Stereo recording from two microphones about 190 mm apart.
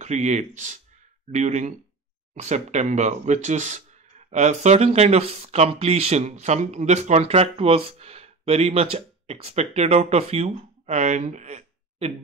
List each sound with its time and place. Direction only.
0.0 s speech: 35° right (ahead or behind)